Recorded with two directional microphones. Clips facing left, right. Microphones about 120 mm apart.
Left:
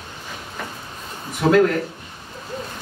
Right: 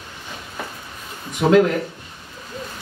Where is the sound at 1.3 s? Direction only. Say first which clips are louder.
Right 1 dB; 5° right (ahead or behind).